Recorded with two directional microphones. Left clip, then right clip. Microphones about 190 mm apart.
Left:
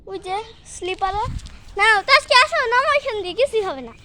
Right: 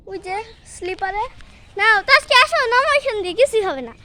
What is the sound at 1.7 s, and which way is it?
Speech, 5° left (ahead or behind).